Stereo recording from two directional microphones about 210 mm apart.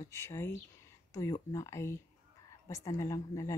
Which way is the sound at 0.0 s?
15° left (ahead or behind).